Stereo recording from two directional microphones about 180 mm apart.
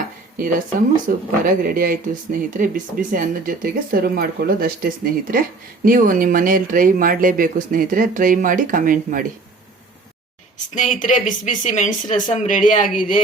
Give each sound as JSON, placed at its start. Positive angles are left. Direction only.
{"t": 1.0, "sound": "speech", "side_deg": -50}
{"t": 10.8, "sound": "speech", "side_deg": 45}